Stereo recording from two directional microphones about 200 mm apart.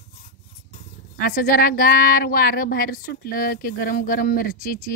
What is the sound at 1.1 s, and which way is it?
Speech, 45° left (ahead or behind).